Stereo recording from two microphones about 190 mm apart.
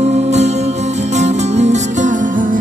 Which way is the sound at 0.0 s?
35° right (ahead or behind).